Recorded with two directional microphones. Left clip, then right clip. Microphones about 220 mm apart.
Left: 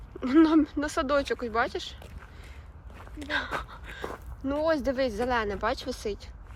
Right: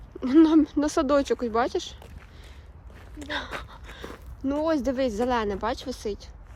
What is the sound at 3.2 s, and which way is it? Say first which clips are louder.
Speech: left 2 dB; 15° right (ahead or behind).